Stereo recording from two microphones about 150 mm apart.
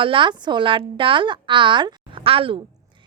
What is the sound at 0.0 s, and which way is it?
A woman's voice, 35° right (ahead or behind).